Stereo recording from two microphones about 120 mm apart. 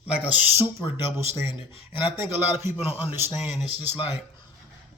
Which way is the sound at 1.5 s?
45° left (ahead or behind).